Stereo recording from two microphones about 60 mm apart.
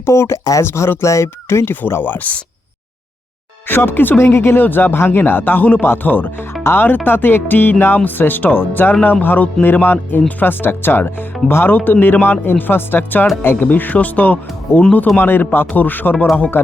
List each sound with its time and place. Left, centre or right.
0.0 s speech: left
2.0 s speech: left
3.7 s speech: left
6.6 s speech: left
6.8 s speech: left